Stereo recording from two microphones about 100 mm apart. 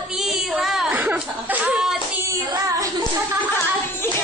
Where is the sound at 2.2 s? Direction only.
35° right (ahead or behind).